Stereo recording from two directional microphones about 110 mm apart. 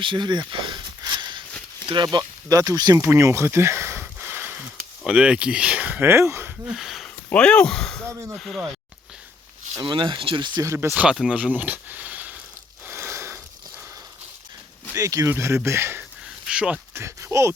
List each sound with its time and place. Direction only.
0.0 s a sound: 45° right (ahead or behind)
2.1 s speech: 35° right (ahead or behind)
3.0 s a sound: 25° right (ahead or behind)
5.0 s speech: 10° right (ahead or behind)
6.7 s a sound: centre (ahead or behind)
7.3 s speech: 10° left (ahead or behind)
9.8 s speech: 45° right (ahead or behind)
10.6 s speech: 25° right (ahead or behind)
10.9 s speech: 10° right (ahead or behind)
12.8 s a sound: 20° right (ahead or behind)
14.9 s speech: 30° right (ahead or behind)
16.5 s speech: 10° right (ahead or behind)
16.9 s speech: 25° right (ahead or behind)